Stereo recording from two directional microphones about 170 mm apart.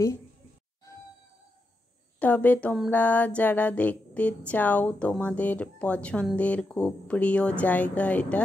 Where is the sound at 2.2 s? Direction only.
10° left (ahead or behind).